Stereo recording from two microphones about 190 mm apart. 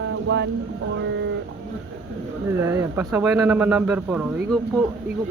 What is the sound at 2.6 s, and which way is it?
Speech, 15° right (ahead or behind).